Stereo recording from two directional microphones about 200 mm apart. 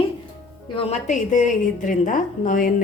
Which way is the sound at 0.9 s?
40° left (ahead or behind).